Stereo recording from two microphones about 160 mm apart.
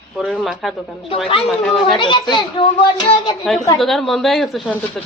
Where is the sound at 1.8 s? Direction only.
30° left (ahead or behind).